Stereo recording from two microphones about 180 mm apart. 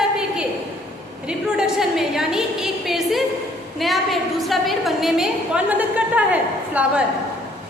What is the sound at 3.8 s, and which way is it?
A woman's voice, centre (ahead or behind).